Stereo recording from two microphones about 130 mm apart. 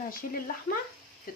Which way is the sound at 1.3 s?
90° left.